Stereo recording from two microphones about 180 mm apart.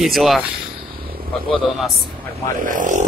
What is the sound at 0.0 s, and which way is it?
Speech, centre (ahead or behind).